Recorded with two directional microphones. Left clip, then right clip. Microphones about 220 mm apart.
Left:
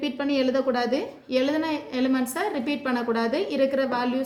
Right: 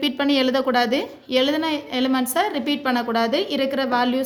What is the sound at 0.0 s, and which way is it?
A woman's voice, 40° right (ahead or behind).